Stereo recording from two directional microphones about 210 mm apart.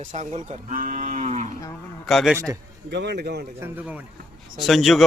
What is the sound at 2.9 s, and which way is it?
Speech, 55° right (ahead or behind).